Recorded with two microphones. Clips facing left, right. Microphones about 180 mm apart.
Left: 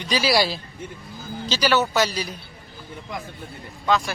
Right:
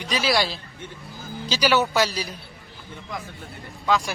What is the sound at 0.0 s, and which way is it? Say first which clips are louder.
Speech: left 2 dB; centre (ahead or behind).